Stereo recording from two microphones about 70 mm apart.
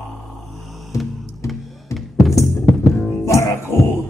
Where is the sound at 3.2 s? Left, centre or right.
Left.